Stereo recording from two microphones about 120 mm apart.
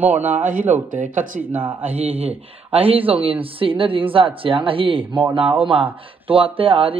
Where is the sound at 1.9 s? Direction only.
55° right (ahead or behind).